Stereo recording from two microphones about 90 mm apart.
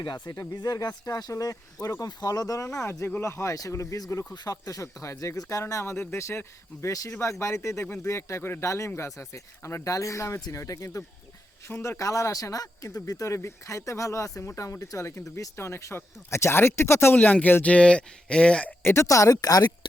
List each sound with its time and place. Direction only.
0.0 s speech: 55° left (ahead or behind)
11.7 s speech: 30° left (ahead or behind)
17.2 s speech: 15° left (ahead or behind)
18.8 s a woman's voice: 25° left (ahead or behind)
19.0 s speech: 35° left (ahead or behind)